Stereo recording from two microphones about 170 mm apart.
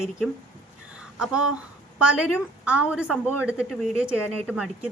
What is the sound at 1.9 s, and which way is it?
Speech, 5° right (ahead or behind).